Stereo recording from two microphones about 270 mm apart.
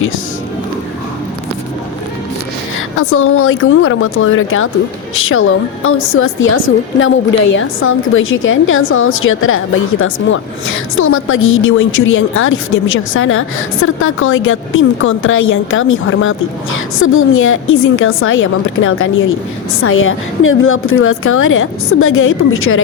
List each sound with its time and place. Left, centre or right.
3.0 s a woman's voice: left